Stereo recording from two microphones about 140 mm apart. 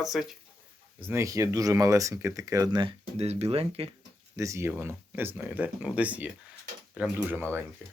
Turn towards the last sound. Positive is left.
turn(degrees=-10)  # may be behind; listen again after turning